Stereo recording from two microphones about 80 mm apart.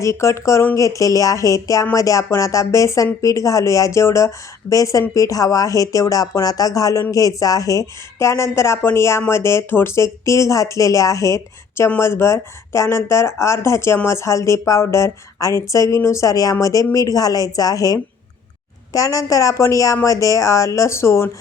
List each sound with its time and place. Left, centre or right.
0.0 s speech: left